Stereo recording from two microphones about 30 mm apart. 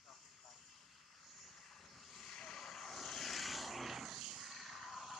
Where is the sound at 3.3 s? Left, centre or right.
Centre.